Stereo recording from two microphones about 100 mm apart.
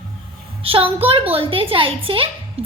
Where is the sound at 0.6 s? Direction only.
70° right (ahead or behind).